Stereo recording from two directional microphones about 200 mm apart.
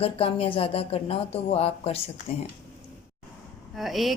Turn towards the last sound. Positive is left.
turn(degrees=0)  # may be behind; listen again after turning